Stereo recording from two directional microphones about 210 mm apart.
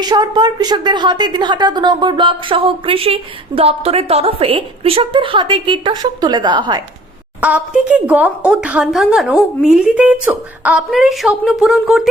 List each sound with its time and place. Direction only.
0.0 s a woman's voice: 20° right (ahead or behind)
7.4 s a woman's voice: 5° right (ahead or behind)